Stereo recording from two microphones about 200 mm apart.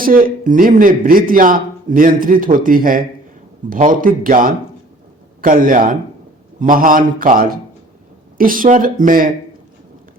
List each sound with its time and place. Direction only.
0.0 s a man's voice: 45° right (ahead or behind)